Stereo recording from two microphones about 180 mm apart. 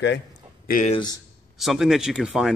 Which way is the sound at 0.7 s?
45° left (ahead or behind).